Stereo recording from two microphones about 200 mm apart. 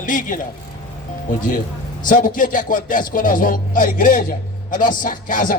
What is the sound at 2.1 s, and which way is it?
Speech, 40° left (ahead or behind).